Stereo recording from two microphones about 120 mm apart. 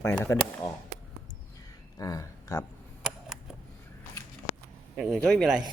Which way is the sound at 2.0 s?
30° left (ahead or behind).